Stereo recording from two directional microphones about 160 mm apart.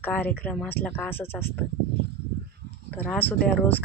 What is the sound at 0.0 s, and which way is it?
Speech, 10° left (ahead or behind).